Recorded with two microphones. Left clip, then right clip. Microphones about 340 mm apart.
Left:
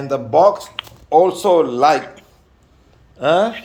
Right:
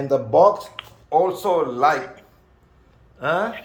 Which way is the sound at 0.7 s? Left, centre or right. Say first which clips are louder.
Left 6 dB; left.